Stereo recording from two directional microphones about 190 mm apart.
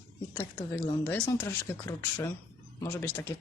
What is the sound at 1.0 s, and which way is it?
Speech, 10° left (ahead or behind).